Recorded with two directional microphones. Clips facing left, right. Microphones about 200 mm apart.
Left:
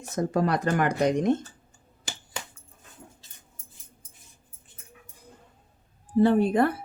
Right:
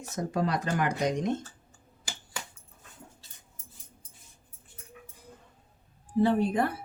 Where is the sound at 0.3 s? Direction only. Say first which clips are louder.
Left 4 dB; 55° left (ahead or behind).